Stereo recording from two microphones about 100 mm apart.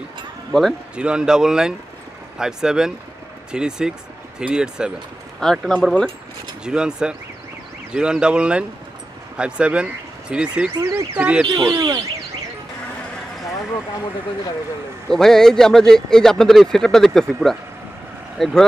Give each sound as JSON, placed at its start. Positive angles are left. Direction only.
{"t": 0.5, "sound": "speech", "side_deg": 0}
{"t": 0.9, "sound": "speech", "side_deg": -10}
{"t": 5.4, "sound": "speech", "side_deg": 5}
{"t": 6.6, "sound": "speech", "side_deg": -10}
{"t": 11.7, "sound": "speech", "side_deg": -40}
{"t": 15.0, "sound": "speech", "side_deg": 5}